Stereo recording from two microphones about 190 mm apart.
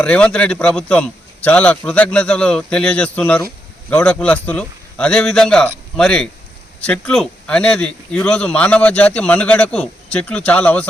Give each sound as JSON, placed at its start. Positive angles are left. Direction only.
{"t": 0.0, "sound": "a man's voice", "side_deg": 5}